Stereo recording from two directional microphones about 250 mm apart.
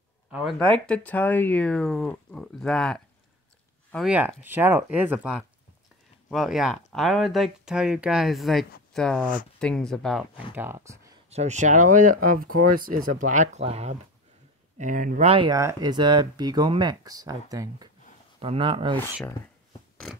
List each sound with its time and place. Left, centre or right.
0.3 s speech: centre
11.2 s speech: right